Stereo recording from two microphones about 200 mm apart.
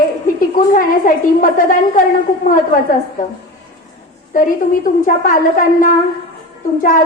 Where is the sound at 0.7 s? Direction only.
45° left (ahead or behind).